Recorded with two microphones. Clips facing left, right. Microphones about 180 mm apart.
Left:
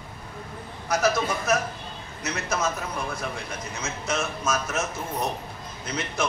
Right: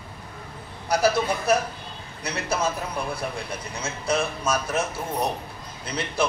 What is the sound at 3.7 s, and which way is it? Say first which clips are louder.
A man's voice: right 4 dB; 30° right (ahead or behind).